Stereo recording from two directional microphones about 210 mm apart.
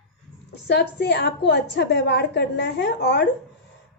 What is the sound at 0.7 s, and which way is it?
Speech, 50° left (ahead or behind).